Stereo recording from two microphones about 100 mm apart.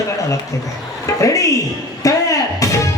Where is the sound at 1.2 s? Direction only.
35° left (ahead or behind).